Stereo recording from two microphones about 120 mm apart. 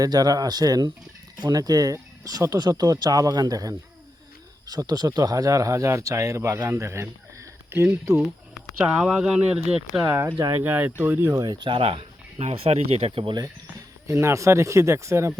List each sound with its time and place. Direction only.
0.0 s speech: 30° right (ahead or behind)
8.2 s speech: 5° right (ahead or behind)
11.3 s speech: 40° right (ahead or behind)
11.8 s speech: 55° right (ahead or behind)
14.1 s speech: 25° right (ahead or behind)